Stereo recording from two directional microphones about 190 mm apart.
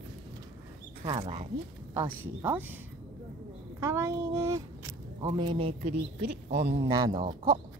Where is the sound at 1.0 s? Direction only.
25° right (ahead or behind).